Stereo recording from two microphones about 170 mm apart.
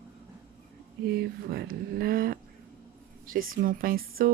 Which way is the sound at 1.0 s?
65° right (ahead or behind).